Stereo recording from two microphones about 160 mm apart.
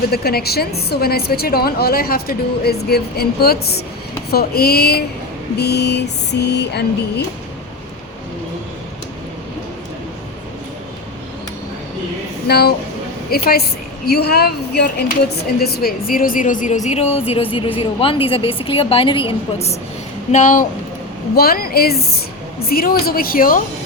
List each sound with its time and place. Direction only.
0.1 s a woman's voice: 75° left (ahead or behind)
5.5 s music: 90° left
12.5 s a woman's voice: 80° left
15.6 s a woman's voice: 75° left (ahead or behind); by 19.7 s 40° left (ahead or behind)
20.3 s speech: 55° left (ahead or behind)
21.3 s a woman's voice: 70° left (ahead or behind)